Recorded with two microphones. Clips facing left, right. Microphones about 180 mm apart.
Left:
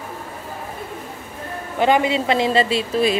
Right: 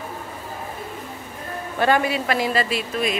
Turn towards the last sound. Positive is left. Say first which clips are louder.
# left 5 dB
turn(degrees=30)  # may be behind; listen again after turning